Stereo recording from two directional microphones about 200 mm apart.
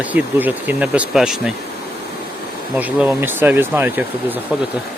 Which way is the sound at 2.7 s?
5° right (ahead or behind).